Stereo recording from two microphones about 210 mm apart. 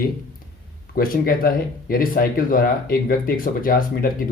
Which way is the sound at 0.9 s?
45° left (ahead or behind).